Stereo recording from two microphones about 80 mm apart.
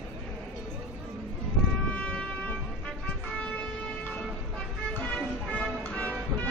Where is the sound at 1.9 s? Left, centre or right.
Centre.